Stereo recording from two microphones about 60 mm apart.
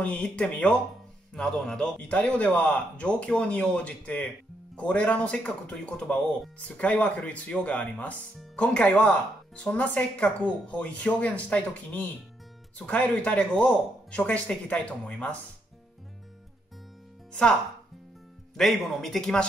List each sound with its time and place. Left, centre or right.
0.0 s speech: left
1.6 s speech: centre
2.0 s speech: left
18.6 s speech: centre